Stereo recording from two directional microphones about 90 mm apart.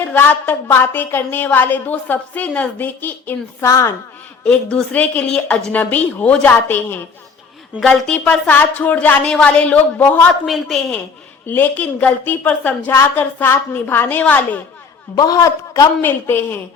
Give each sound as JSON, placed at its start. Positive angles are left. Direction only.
{"t": 0.0, "sound": "a woman's voice", "side_deg": 20}
{"t": 3.6, "sound": "a woman's voice", "side_deg": 35}
{"t": 4.4, "sound": "a woman's voice", "side_deg": 10}
{"t": 7.8, "sound": "a woman's voice", "side_deg": 5}
{"t": 10.4, "sound": "a woman's voice", "side_deg": 0}
{"t": 11.4, "sound": "a woman's voice", "side_deg": 20}
{"t": 15.1, "sound": "a man's voice", "side_deg": 45}
{"t": 16.0, "sound": "a woman's voice", "side_deg": 25}